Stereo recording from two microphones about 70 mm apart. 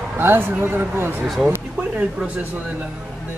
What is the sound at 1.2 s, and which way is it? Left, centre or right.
Speech, centre.